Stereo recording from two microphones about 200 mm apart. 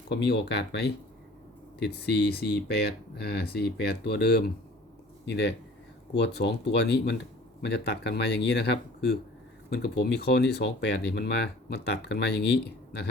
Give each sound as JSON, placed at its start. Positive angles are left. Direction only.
{"t": 0.1, "sound": "speech", "side_deg": 55}